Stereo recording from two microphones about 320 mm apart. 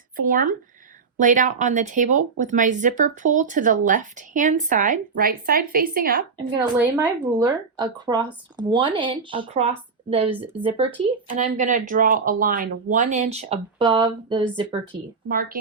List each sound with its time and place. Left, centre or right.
0.2 s speech: right
6.3 s speech: centre